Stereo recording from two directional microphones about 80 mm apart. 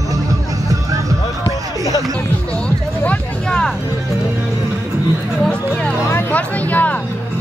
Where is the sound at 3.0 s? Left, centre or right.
Centre.